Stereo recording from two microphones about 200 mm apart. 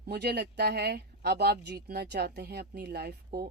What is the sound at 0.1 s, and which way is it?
Speech, 55° right (ahead or behind).